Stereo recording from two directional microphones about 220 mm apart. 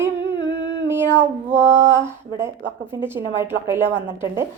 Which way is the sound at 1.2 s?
10° right (ahead or behind).